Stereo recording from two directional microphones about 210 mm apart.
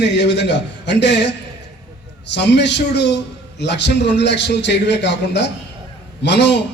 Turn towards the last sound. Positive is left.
turn(degrees=55)  # may be behind; listen again after turning